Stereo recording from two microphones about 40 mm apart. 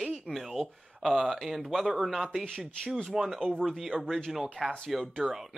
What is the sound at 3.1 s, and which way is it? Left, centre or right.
Speech, centre.